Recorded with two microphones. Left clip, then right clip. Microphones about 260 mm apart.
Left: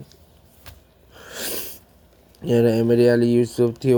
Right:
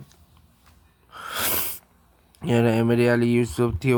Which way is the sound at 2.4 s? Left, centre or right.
Centre.